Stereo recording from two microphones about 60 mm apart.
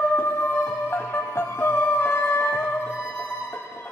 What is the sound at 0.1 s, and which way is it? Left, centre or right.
Music, left.